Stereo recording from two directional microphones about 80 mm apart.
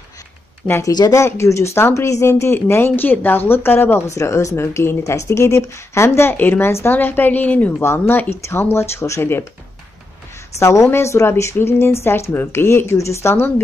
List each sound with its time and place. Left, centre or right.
0.8 s speech: left
1.1 s speech: left
4.2 s speech: left
10.6 s speech: left